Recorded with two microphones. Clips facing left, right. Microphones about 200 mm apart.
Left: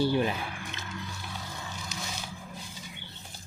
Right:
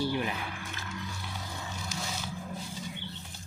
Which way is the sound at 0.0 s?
30° left (ahead or behind).